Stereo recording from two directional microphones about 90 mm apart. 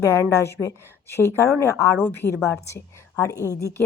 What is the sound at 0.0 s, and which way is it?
A woman's voice, 35° left (ahead or behind).